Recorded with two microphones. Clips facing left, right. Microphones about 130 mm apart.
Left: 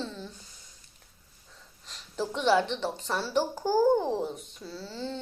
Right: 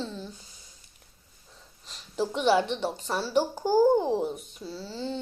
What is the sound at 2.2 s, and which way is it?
A child's voice, 5° right (ahead or behind).